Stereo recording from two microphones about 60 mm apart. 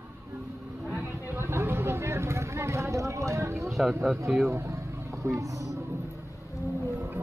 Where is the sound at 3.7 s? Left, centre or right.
Centre.